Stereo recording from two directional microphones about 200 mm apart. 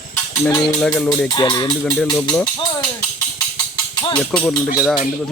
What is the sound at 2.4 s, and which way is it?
Speech, 20° left (ahead or behind).